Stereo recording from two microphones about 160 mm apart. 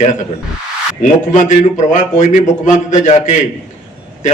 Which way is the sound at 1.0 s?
50° left (ahead or behind).